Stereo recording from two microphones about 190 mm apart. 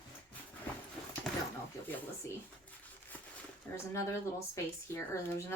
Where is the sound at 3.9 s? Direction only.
15° left (ahead or behind).